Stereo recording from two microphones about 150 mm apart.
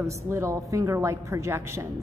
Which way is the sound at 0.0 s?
20° right (ahead or behind).